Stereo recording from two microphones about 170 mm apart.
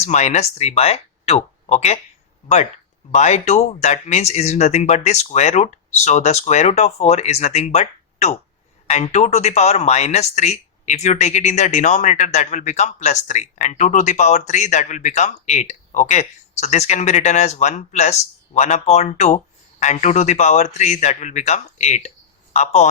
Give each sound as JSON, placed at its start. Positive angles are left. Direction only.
{"t": 0.0, "sound": "speech", "side_deg": 40}
{"t": 3.1, "sound": "speech", "side_deg": 40}